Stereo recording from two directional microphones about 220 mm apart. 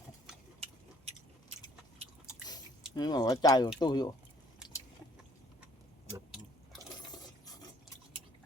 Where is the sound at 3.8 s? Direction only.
20° left (ahead or behind).